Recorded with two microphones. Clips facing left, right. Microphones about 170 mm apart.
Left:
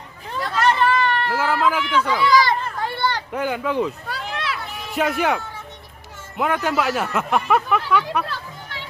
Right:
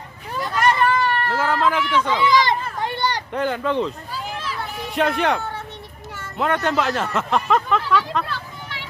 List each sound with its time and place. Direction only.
0.3 s hubbub: 10° right (ahead or behind)
1.3 s speech: 5° left (ahead or behind)
2.0 s children playing: 20° right (ahead or behind)
3.3 s speech: 5° left (ahead or behind)
4.1 s a sound: 75° left (ahead or behind)
4.9 s speech: 5° left (ahead or behind)